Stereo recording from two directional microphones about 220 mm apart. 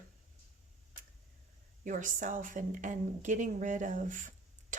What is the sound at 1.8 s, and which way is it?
Speech, 35° right (ahead or behind).